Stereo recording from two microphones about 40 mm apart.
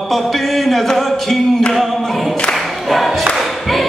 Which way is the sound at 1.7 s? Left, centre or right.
Centre.